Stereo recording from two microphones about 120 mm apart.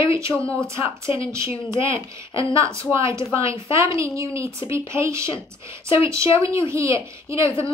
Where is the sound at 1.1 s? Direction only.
45° left (ahead or behind).